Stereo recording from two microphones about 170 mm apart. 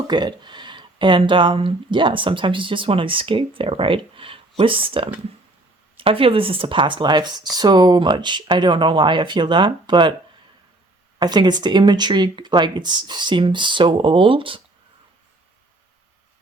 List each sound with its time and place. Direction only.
0.1 s speech: 25° right (ahead or behind)
11.2 s speech: 25° right (ahead or behind)